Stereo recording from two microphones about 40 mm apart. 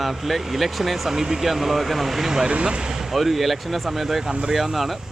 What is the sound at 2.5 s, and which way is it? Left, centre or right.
Speech, right.